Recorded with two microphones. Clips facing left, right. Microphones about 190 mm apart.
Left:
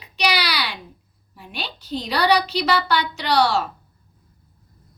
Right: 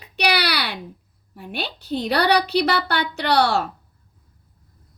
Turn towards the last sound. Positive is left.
turn(degrees=-55)  # may be behind; listen again after turning